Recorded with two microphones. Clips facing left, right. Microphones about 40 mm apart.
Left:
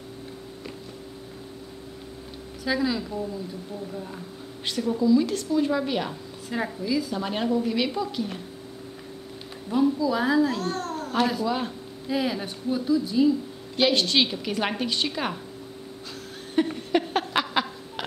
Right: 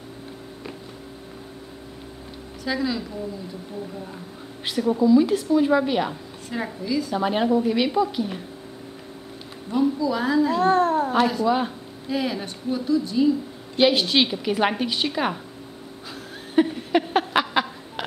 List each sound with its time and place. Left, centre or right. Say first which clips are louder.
2.6 s speech: even; centre
4.6 s a woman's voice: right 3 dB; centre
6.5 s speech: even; centre
7.2 s a woman's voice: right 5 dB; centre
9.7 s speech: right 1 dB; centre
10.6 s a child's voice: right 11 dB; right
11.1 s a woman's voice: even; centre
12.1 s a woman's voice: right 1 dB; centre
16.6 s a sound: right 2 dB; centre